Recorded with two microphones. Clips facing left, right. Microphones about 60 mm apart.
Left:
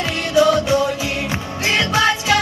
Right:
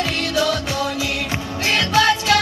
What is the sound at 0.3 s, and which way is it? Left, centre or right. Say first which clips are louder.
Music: left 7 dB; centre.